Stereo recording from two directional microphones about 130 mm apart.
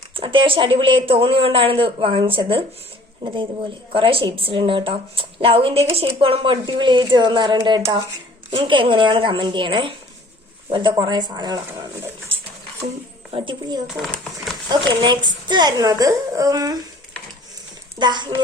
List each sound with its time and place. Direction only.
0.1 s a woman's voice: 40° right (ahead or behind)
12.3 s a sound: 45° right (ahead or behind)
13.3 s a woman's voice: 40° right (ahead or behind)
13.8 s speech: centre (ahead or behind)
14.7 s a woman's voice: 35° right (ahead or behind)
18.0 s a woman's voice: 35° right (ahead or behind)